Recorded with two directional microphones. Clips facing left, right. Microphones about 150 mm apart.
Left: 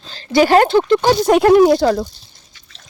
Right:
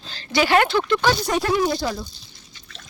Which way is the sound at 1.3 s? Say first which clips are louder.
Left 11 dB; 60° left (ahead or behind).